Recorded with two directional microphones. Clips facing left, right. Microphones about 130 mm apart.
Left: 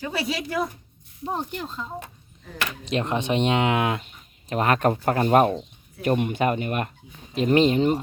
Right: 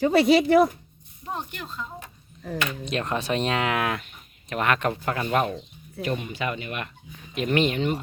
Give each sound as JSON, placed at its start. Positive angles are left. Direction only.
{"t": 0.1, "sound": "speech", "side_deg": -75}
{"t": 1.2, "sound": "speech", "side_deg": 30}
{"t": 7.3, "sound": "speech", "side_deg": 30}